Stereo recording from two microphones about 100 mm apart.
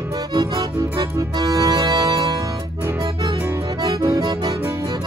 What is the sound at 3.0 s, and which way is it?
Music, 50° right (ahead or behind).